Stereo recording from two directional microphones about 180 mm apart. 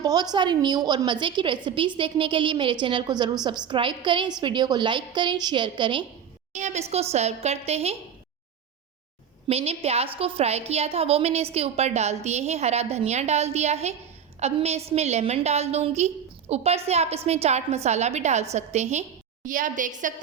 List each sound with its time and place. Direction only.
0.0 s a woman's voice: 20° right (ahead or behind)
6.5 s a woman's voice: 40° right (ahead or behind)
9.5 s a woman's voice: 35° right (ahead or behind)